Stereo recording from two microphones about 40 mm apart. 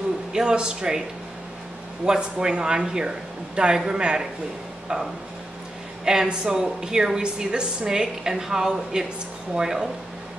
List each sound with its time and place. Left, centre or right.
0.3 s speech: centre
2.0 s speech: centre
6.0 s a woman's voice: centre